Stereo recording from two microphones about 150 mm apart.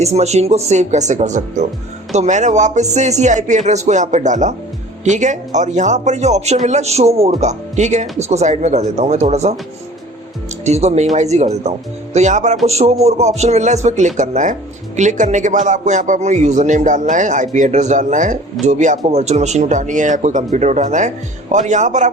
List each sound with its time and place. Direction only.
0.0 s speech: 45° right (ahead or behind)
10.7 s a man's voice: 45° right (ahead or behind)